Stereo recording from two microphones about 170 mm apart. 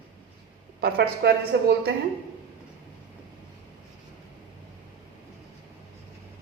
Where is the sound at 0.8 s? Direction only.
65° right (ahead or behind).